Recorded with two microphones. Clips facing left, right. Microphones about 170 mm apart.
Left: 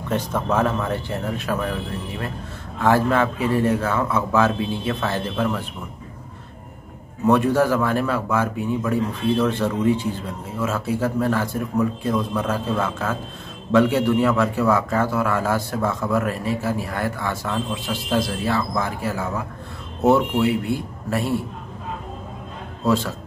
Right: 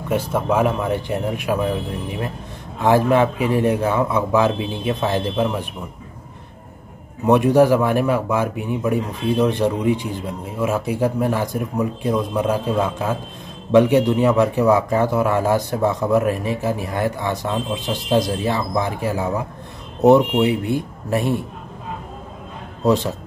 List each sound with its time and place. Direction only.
0.1 s a man's voice: 10° right (ahead or behind)
7.2 s a man's voice: 15° right (ahead or behind)
22.8 s speech: 20° right (ahead or behind)